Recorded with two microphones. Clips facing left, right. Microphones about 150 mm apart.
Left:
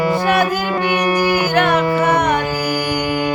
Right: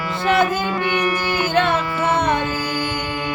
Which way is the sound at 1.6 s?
25° right (ahead or behind).